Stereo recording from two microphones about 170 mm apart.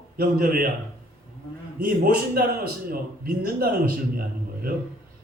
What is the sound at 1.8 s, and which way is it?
A man's voice, 55° right (ahead or behind).